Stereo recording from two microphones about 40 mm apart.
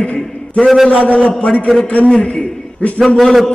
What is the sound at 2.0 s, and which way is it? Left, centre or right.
Speech, left.